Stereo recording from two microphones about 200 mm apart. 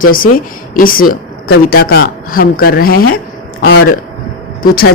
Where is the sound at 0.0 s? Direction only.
45° left (ahead or behind).